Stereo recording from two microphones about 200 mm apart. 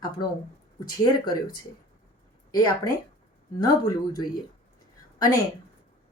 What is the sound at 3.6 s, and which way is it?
Speech, 20° left (ahead or behind).